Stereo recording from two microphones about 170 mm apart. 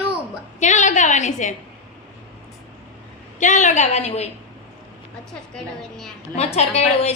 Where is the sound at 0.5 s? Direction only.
45° left (ahead or behind).